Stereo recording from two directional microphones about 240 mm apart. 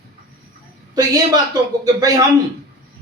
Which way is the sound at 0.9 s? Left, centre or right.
Centre.